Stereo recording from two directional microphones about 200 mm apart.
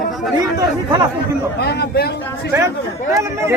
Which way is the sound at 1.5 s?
55° left (ahead or behind).